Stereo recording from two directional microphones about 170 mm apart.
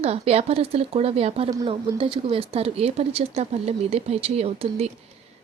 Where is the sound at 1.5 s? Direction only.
25° right (ahead or behind).